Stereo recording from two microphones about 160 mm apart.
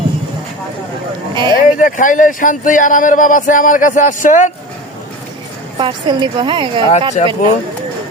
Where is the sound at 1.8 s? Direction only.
55° left (ahead or behind).